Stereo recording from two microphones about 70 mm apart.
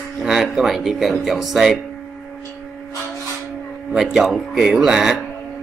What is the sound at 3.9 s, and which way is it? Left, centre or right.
Speech, centre.